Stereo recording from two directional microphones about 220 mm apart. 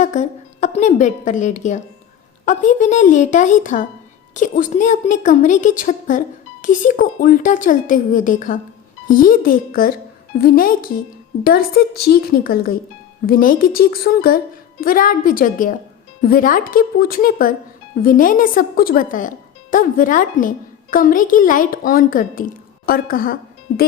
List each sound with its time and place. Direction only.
0.0 s a woman's voice: 35° left (ahead or behind)